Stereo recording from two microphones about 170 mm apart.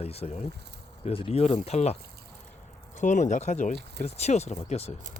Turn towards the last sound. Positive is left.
turn(degrees=40)  # may be behind; listen again after turning